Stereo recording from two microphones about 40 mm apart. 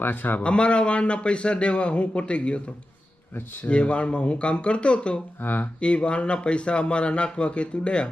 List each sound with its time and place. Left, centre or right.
0.0 s speech: left
0.4 s a man's voice: left
3.3 s speech: left
3.7 s a man's voice: left
5.4 s speech: left
5.8 s a man's voice: left